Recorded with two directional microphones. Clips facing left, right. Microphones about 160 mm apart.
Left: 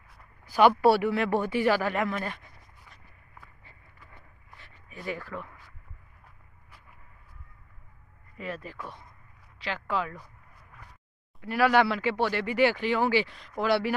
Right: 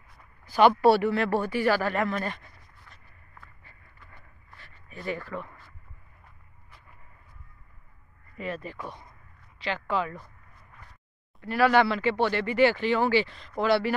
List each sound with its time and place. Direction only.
0.1 s speech: 5° left (ahead or behind)
3.4 s a sound: 10° left (ahead or behind)
4.8 s speech: 10° left (ahead or behind)
8.4 s speech: 5° left (ahead or behind)
10.2 s a sound: 10° left (ahead or behind)
11.4 s speech: 10° left (ahead or behind)